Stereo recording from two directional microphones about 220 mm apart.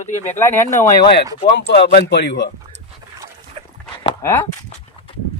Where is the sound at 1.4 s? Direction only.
50° left (ahead or behind).